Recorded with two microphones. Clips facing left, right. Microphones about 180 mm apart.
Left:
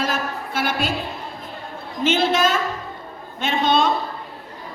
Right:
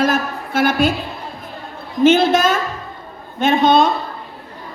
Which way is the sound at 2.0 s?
45° right (ahead or behind).